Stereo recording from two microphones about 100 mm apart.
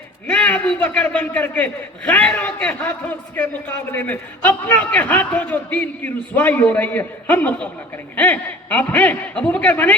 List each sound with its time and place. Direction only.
0.3 s a man's voice: 15° left (ahead or behind)